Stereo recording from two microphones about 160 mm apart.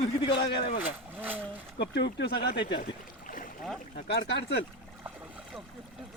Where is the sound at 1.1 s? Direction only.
10° right (ahead or behind).